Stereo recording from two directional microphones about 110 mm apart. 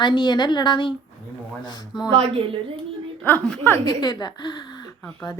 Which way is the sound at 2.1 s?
65° right (ahead or behind).